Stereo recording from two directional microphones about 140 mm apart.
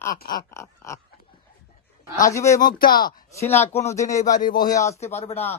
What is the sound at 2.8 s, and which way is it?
Speech, 90° left.